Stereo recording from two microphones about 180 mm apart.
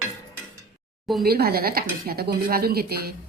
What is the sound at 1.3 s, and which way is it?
A woman's voice, 60° right (ahead or behind).